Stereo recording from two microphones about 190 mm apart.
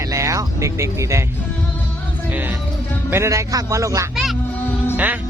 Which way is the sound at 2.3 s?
10° right (ahead or behind).